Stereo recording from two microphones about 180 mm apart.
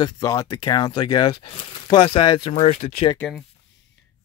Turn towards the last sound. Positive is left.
turn(degrees=40)  # may be behind; listen again after turning